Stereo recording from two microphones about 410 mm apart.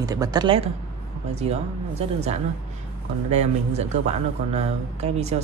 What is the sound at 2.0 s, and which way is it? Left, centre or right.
Speech, centre.